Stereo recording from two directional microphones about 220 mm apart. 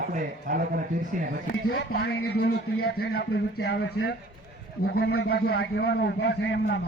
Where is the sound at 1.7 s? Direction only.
50° left (ahead or behind).